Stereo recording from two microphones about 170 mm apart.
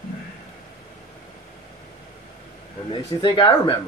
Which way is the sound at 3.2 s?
30° left (ahead or behind).